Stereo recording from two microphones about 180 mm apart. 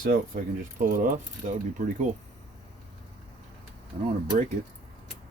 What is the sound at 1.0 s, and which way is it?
Speech, 45° right (ahead or behind).